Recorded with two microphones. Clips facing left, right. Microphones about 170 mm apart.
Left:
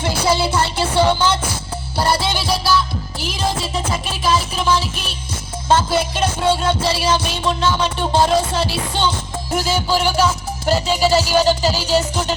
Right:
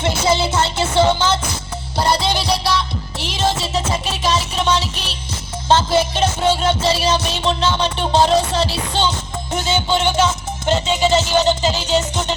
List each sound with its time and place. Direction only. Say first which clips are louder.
0.3 s music: even; 25° right (ahead or behind)
2.3 s music: right 1 dB; centre (ahead or behind)
2.6 s music: left 2 dB; 25° right (ahead or behind)
11.8 s music: left 1 dB; 10° left (ahead or behind)